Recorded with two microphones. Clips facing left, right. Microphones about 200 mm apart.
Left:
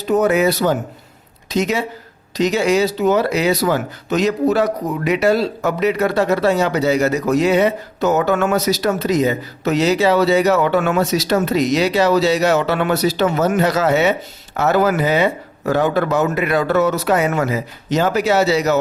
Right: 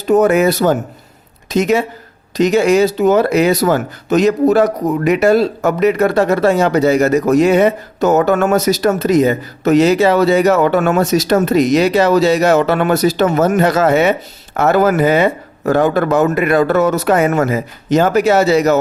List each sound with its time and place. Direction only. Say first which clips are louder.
0.0 s a woman's voice: right 4 dB; 50° right (ahead or behind)